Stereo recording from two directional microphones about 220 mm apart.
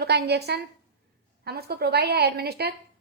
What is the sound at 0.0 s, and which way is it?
A woman's voice, 50° right (ahead or behind).